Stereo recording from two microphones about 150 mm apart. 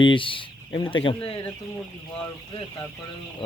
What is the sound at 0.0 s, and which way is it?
Speech, 35° left (ahead or behind).